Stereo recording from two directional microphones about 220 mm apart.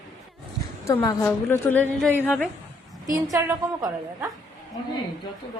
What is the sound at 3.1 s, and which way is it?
A woman's voice, 15° right (ahead or behind).